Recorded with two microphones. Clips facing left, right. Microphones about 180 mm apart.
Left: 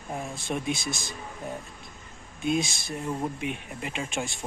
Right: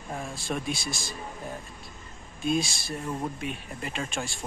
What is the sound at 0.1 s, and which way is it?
Speech, 20° left (ahead or behind).